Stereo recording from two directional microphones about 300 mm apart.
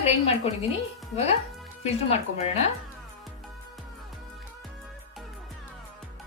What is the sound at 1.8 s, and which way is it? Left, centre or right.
Speech, left.